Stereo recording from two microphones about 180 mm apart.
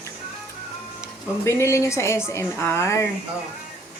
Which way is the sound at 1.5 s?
15° left (ahead or behind).